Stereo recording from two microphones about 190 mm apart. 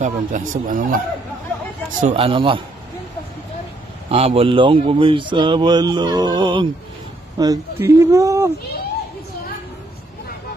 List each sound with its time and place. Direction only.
0.0 s speech: 45° right (ahead or behind)
2.0 s speech: 35° right (ahead or behind)
4.1 s speech: 30° right (ahead or behind); by 8.5 s 15° right (ahead or behind)